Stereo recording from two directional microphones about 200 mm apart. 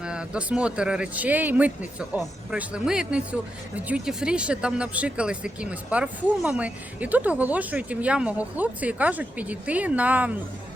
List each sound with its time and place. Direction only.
0.0 s a man's voice: 5° right (ahead or behind)